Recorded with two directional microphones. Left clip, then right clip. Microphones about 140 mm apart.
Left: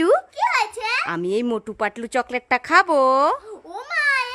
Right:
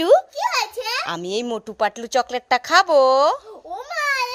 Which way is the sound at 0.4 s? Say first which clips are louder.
Left 2 dB; 25° left (ahead or behind).